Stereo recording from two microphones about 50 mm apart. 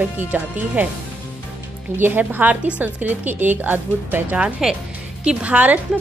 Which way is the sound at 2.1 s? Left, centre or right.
Right.